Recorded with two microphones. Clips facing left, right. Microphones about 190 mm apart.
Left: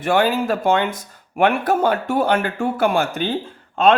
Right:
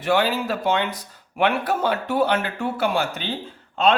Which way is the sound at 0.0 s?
50° left (ahead or behind).